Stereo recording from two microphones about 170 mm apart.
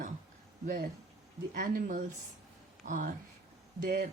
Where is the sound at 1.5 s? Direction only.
55° right (ahead or behind).